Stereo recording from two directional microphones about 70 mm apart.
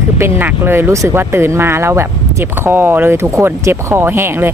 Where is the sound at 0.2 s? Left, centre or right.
Right.